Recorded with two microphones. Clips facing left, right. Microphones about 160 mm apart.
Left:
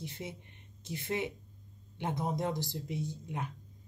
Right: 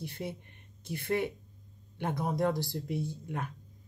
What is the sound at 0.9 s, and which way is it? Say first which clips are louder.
Speech: right 4 dB; 20° left (ahead or behind).